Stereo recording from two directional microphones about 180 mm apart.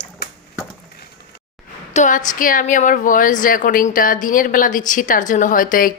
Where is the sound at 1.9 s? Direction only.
45° left (ahead or behind).